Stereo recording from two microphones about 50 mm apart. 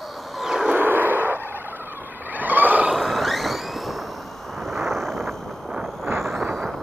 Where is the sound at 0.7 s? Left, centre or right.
Right.